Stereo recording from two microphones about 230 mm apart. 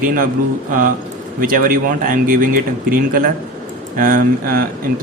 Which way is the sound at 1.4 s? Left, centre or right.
Right.